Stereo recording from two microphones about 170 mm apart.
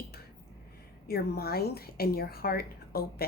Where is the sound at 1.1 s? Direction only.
65° left (ahead or behind).